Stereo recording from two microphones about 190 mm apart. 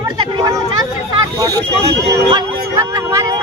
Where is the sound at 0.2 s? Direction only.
20° right (ahead or behind).